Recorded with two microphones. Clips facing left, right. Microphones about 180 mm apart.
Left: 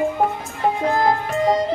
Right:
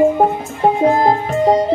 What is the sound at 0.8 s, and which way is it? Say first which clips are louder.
Music: right 5 dB; 25° right (ahead or behind).